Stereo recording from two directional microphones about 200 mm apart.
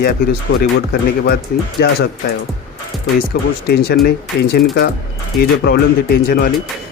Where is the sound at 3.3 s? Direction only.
55° left (ahead or behind).